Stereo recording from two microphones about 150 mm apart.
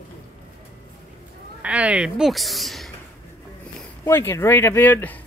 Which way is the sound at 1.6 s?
10° right (ahead or behind).